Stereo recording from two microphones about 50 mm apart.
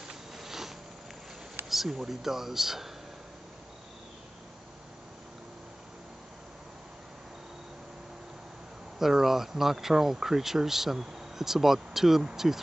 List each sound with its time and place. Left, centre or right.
0.1 s a sound: centre
1.7 s speech: centre
8.9 s speech: centre